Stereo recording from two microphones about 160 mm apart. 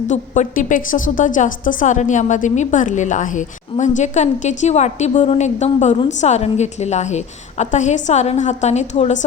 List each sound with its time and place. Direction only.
0.1 s a woman's voice: 55° left (ahead or behind)